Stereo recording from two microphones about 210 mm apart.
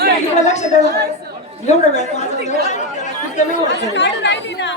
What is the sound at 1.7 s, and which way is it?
Chatter, 35° left (ahead or behind).